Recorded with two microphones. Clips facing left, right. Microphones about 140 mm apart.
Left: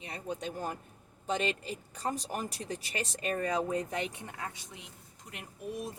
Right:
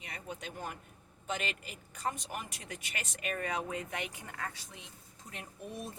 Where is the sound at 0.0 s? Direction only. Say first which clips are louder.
Left 6 dB; 30° left (ahead or behind).